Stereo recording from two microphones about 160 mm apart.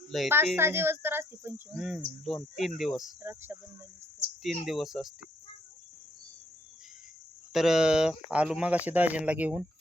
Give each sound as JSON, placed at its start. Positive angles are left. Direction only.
{"t": 0.1, "sound": "cricket", "side_deg": 0}
{"t": 0.5, "sound": "speech", "side_deg": -15}
{"t": 1.7, "sound": "cricket", "side_deg": 0}
{"t": 3.2, "sound": "cricket", "side_deg": -15}
{"t": 4.6, "sound": "cricket", "side_deg": 0}
{"t": 7.5, "sound": "speech", "side_deg": -5}